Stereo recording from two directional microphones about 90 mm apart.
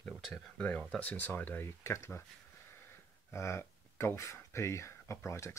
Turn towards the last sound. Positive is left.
turn(degrees=30)  # may be behind; listen again after turning